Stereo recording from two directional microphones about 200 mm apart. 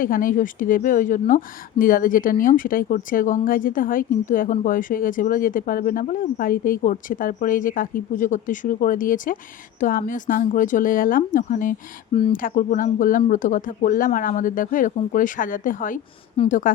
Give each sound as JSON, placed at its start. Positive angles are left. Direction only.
{"t": 0.0, "sound": "speech", "side_deg": 45}